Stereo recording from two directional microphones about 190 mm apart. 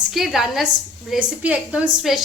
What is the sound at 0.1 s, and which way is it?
A woman's voice, centre (ahead or behind).